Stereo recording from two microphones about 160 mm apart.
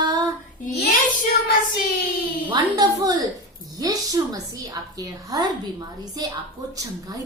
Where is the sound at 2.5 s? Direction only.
25° right (ahead or behind).